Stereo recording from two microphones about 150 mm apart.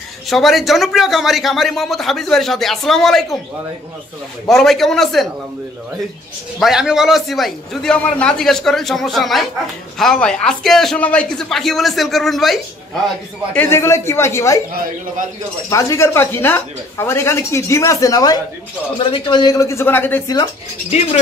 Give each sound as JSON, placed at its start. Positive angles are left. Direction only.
{"t": 0.3, "sound": "speech", "side_deg": 0}
{"t": 4.5, "sound": "speech", "side_deg": 0}
{"t": 6.6, "sound": "speech", "side_deg": -5}
{"t": 13.5, "sound": "speech", "side_deg": 15}
{"t": 15.7, "sound": "speech", "side_deg": 20}